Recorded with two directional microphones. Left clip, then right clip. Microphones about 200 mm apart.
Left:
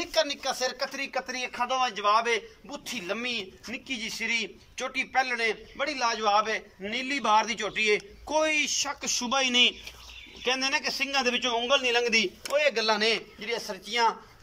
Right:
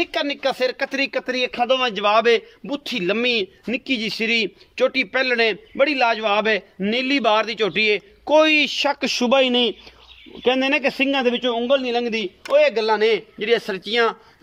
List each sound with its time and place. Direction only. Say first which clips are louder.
0.0 s a man's voice: right 6 dB; 45° right (ahead or behind)